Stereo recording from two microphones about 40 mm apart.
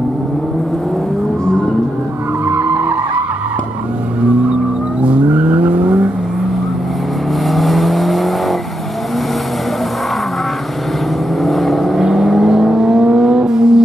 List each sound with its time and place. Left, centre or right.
2.5 s skidding: right
5.3 s vehicle: right
7.4 s vehicle: centre
11.4 s vehicle: centre
12.0 s vehicle: centre